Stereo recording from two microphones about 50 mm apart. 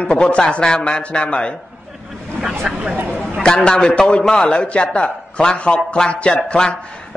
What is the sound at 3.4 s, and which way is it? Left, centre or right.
Speech, centre.